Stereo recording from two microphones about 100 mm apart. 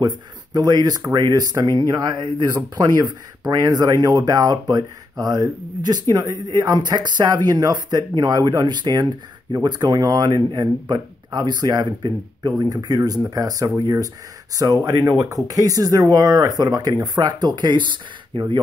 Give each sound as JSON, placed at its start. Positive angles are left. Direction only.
{"t": 0.0, "sound": "speech", "side_deg": -45}